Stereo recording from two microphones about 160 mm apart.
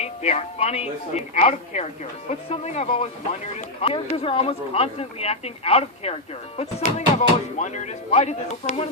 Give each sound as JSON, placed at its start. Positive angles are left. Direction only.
{"t": 0.0, "sound": "speech", "side_deg": 40}